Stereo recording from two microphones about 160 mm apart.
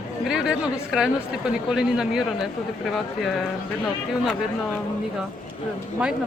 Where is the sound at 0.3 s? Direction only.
5° right (ahead or behind).